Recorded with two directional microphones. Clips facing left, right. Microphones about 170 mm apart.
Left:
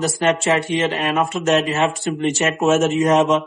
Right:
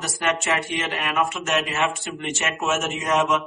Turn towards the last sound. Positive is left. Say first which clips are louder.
# left 7 dB
turn(degrees=30)  # may be behind; listen again after turning